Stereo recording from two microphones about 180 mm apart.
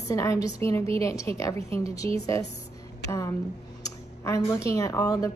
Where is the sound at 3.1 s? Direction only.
15° left (ahead or behind).